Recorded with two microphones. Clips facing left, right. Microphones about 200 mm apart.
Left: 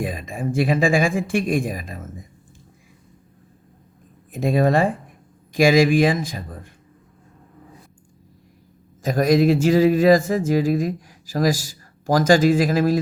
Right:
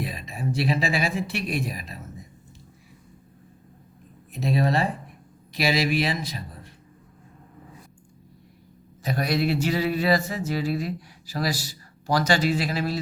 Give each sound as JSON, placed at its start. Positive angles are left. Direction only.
{"t": 0.0, "sound": "speech", "side_deg": 50}
{"t": 4.3, "sound": "speech", "side_deg": 50}
{"t": 9.0, "sound": "speech", "side_deg": 45}